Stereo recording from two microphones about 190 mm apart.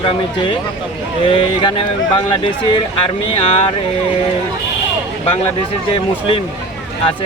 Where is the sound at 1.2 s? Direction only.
25° left (ahead or behind).